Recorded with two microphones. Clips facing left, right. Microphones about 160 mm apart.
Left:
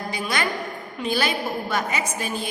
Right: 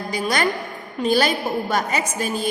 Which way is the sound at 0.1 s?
40° right (ahead or behind).